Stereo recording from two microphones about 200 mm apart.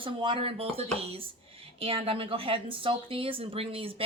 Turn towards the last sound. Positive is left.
turn(degrees=-30)  # may be behind; listen again after turning